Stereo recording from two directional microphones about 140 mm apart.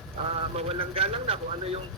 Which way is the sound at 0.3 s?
45° right (ahead or behind).